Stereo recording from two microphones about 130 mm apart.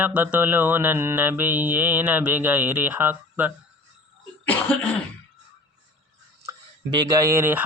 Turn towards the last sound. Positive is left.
turn(degrees=-20)  # may be behind; listen again after turning